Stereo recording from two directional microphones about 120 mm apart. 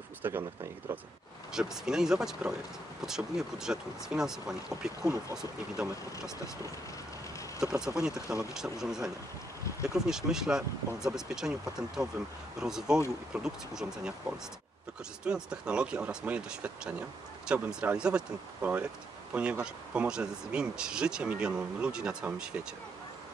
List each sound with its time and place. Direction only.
0.2 s speech: 20° right (ahead or behind)
1.5 s speech: 5° right (ahead or behind)
7.6 s speech: 5° right (ahead or behind)
15.2 s speech: 5° right (ahead or behind)